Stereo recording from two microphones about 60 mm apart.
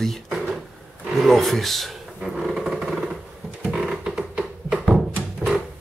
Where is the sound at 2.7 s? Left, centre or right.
Centre.